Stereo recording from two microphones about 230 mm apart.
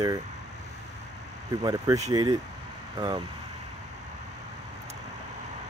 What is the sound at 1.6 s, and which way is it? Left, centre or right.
Speech, centre.